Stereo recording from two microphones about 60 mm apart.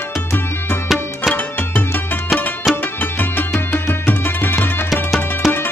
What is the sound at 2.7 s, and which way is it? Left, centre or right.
Music, left.